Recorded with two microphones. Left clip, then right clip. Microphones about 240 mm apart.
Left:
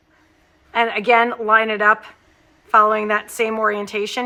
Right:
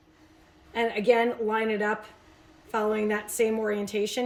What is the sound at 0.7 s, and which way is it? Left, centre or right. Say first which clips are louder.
Speech: left 9 dB; left.